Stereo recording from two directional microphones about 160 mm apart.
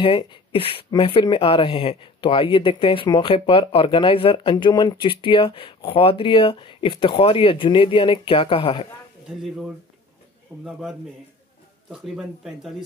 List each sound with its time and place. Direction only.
0.0 s speech: 35° left (ahead or behind)
9.3 s speech: centre (ahead or behind)